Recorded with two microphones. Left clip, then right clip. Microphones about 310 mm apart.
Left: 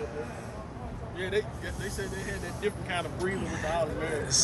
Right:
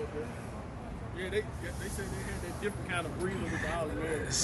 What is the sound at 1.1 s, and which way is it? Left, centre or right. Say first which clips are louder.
Speech: left 4 dB; centre.